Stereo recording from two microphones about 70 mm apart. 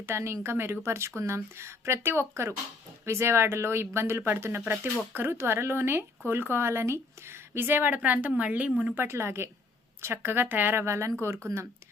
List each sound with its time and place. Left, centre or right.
0.0 s speech: right; by 8.9 s centre
9.0 s speech: right